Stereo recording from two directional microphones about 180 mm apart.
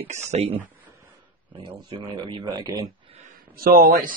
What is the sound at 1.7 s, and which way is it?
Speech, 25° right (ahead or behind).